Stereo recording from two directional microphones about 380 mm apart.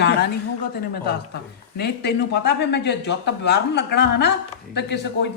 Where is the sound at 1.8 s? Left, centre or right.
Left.